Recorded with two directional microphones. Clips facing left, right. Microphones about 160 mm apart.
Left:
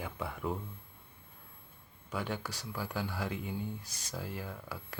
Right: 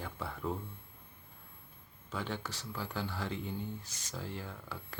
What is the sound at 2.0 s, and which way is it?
Speech, 10° left (ahead or behind).